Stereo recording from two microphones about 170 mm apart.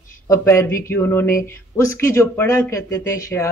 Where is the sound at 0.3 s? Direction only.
15° left (ahead or behind).